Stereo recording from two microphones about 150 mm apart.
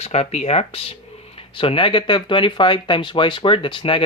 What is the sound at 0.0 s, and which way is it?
Speech, 45° left (ahead or behind).